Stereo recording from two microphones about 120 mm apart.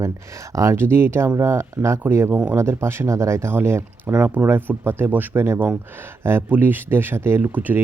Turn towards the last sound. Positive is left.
turn(degrees=-15)  # may be behind; listen again after turning